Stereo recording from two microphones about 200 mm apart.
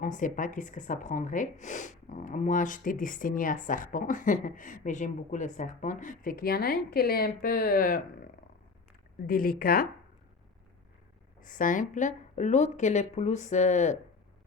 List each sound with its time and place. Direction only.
0.0 s speech: 40° left (ahead or behind)
11.3 s speech: 40° left (ahead or behind)